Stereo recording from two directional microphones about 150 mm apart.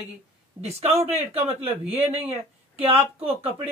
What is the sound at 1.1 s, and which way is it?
Speech, 45° right (ahead or behind).